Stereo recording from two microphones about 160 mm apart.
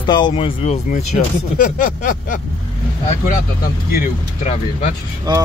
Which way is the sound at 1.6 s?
55° left (ahead or behind).